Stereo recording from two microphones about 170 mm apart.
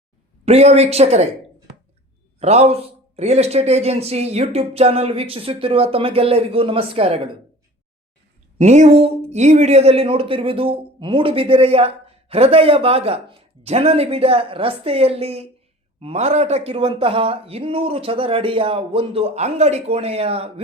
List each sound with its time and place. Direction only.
0.4 s speech: 40° right (ahead or behind)
2.4 s speech: 40° right (ahead or behind)
8.5 s speech: 40° right (ahead or behind)